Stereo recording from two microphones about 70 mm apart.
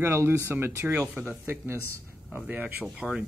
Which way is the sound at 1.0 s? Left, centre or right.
Centre.